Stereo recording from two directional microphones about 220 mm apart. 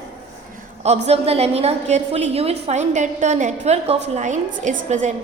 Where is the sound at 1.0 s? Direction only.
25° right (ahead or behind).